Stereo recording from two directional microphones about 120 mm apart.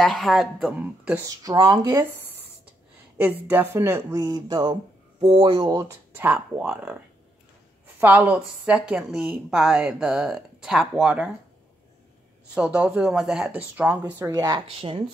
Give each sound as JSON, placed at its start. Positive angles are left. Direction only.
{"t": 0.0, "sound": "speech", "side_deg": 0}
{"t": 1.2, "sound": "speech", "side_deg": -30}
{"t": 3.2, "sound": "speech", "side_deg": -15}
{"t": 5.9, "sound": "a woman's voice", "side_deg": -15}
{"t": 12.5, "sound": "a woman's voice", "side_deg": -10}
{"t": 14.2, "sound": "speech", "side_deg": -30}
{"t": 14.8, "sound": "speech", "side_deg": -50}